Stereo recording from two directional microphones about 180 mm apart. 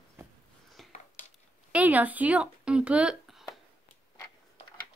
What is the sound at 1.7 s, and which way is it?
Speech, 10° right (ahead or behind).